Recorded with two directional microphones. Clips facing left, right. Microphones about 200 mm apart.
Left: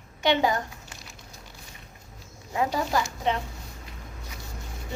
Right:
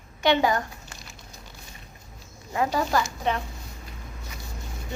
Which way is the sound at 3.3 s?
20° left (ahead or behind).